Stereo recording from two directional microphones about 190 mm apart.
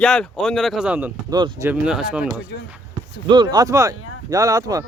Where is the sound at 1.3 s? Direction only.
20° right (ahead or behind).